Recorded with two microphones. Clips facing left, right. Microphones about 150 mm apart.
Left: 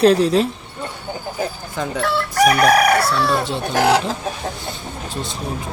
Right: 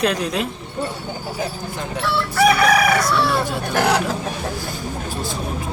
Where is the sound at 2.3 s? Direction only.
45° left (ahead or behind).